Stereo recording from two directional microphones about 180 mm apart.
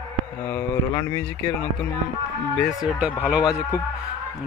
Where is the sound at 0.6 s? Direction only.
15° left (ahead or behind).